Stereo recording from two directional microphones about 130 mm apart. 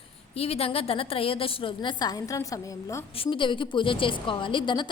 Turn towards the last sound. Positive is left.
turn(degrees=40)  # may be behind; listen again after turning